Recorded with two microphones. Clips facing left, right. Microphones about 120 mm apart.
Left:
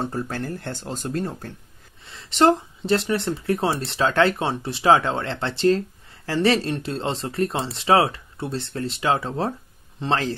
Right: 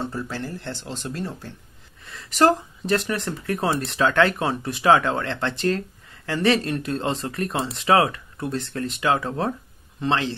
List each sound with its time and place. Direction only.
0.0 s speech: 45° left (ahead or behind)
2.0 s a man's voice: 25° left (ahead or behind)